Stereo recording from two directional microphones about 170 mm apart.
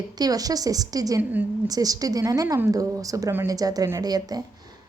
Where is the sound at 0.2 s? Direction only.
20° right (ahead or behind).